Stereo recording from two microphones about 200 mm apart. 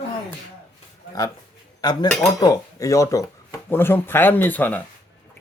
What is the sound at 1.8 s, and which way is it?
Speech, 20° left (ahead or behind).